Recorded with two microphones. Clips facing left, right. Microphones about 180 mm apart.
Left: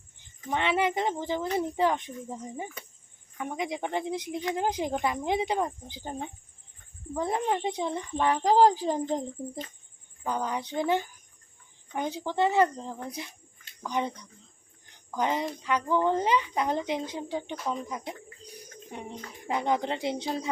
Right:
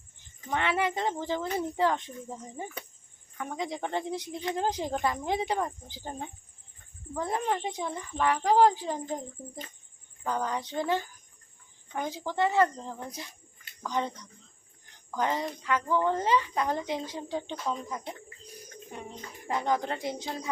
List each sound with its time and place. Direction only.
0.5 s a child's voice: 20° left (ahead or behind)
10.2 s speech: 15° left (ahead or behind)
15.1 s a child's voice: 15° left (ahead or behind)